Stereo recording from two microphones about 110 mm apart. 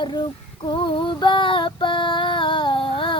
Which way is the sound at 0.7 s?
45° left (ahead or behind).